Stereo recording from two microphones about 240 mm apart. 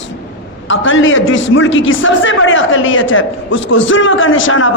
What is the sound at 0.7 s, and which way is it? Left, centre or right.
A man's voice, left.